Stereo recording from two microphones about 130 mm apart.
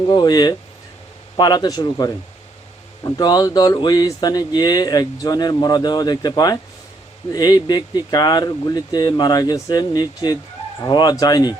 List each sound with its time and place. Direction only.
0.1 s speech: 35° left (ahead or behind)